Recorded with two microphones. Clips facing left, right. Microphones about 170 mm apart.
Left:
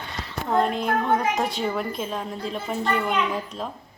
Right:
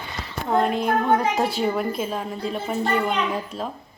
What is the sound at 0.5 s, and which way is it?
A woman's voice, centre (ahead or behind).